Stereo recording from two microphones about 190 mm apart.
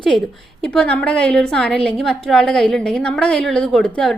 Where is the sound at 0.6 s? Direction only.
5° left (ahead or behind).